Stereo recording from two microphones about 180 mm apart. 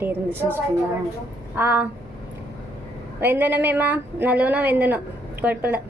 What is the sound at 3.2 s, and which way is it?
A woman's voice, 10° right (ahead or behind).